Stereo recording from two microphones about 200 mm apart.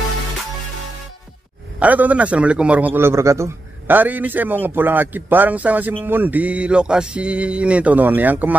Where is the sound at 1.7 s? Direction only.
10° right (ahead or behind).